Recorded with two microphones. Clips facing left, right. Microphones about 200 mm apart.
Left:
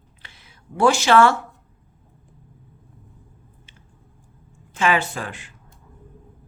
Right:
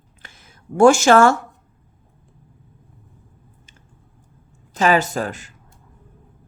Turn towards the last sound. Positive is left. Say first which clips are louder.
# right 6 dB
turn(degrees=-40)  # may be behind; listen again after turning